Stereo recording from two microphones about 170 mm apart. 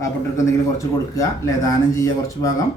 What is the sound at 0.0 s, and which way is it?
Speech, 15° left (ahead or behind).